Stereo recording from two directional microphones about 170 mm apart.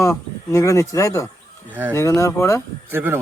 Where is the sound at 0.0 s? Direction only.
15° left (ahead or behind).